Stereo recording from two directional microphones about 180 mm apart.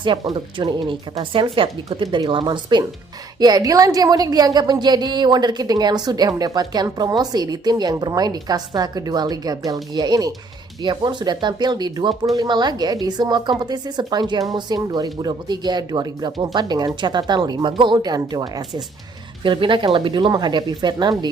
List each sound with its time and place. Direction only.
0.0 s a woman's voice: 30° right (ahead or behind)